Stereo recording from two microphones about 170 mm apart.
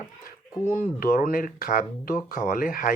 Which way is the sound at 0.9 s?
55° left (ahead or behind).